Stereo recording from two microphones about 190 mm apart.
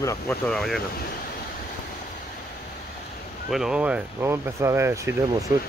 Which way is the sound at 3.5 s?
5° right (ahead or behind).